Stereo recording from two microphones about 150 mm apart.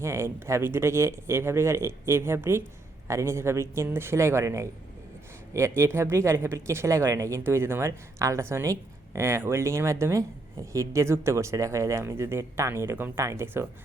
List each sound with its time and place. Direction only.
0.0 s speech: 20° right (ahead or behind)